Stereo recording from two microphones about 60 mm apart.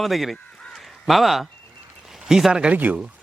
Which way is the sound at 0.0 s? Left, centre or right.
Centre.